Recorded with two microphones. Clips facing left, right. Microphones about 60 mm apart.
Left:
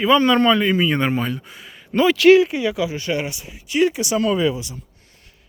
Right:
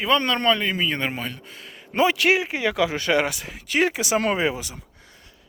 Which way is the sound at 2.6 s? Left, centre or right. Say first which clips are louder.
Even; right.